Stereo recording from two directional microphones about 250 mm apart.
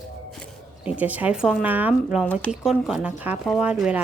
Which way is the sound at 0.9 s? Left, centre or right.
Centre.